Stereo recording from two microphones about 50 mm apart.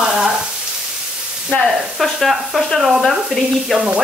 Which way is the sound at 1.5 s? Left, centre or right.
Left.